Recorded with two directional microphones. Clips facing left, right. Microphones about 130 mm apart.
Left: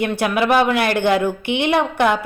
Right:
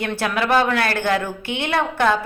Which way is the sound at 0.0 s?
15° left (ahead or behind).